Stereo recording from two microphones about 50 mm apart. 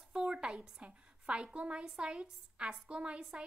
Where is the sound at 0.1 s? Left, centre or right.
Centre.